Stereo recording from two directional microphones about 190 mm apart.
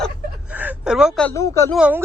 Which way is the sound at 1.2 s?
15° left (ahead or behind).